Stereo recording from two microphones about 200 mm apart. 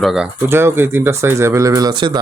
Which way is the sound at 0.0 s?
Centre (ahead or behind).